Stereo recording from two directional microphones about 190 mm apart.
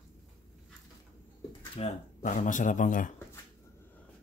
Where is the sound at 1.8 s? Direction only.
35° left (ahead or behind).